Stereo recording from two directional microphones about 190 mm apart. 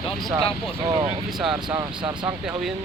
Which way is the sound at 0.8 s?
25° right (ahead or behind).